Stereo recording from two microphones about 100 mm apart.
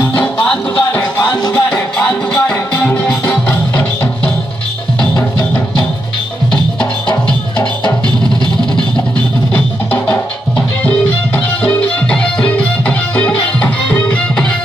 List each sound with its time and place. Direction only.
0.0 s music: 15° left (ahead or behind)
1.3 s music: 40° left (ahead or behind)
1.7 s music: 15° left (ahead or behind)
5.1 s music: 40° left (ahead or behind)
6.5 s music: 10° left (ahead or behind)
9.5 s music: 15° left (ahead or behind)